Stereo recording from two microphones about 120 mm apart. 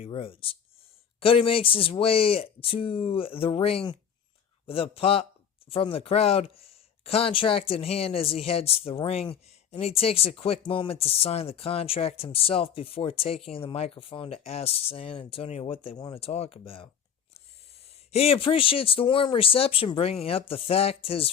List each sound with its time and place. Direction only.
0.0 s speech: 50° left (ahead or behind)
18.1 s speech: 55° left (ahead or behind)